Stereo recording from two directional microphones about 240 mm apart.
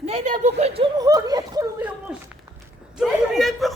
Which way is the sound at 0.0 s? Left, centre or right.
Right.